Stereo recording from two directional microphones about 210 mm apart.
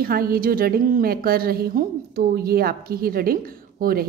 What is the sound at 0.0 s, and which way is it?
A woman's voice, 45° right (ahead or behind).